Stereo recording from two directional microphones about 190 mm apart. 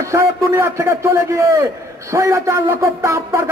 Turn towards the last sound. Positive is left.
turn(degrees=-15)  # may be behind; listen again after turning